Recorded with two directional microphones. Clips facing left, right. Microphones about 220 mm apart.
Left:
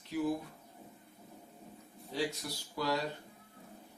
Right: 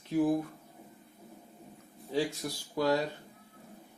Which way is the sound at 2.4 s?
50° right (ahead or behind).